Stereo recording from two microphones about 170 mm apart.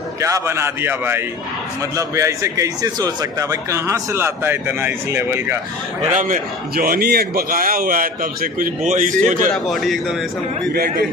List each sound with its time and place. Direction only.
0.2 s a man's voice: 15° right (ahead or behind)
6.1 s a man's voice: 50° right (ahead or behind)
9.5 s a man's voice: centre (ahead or behind)
10.7 s a man's voice: 60° right (ahead or behind)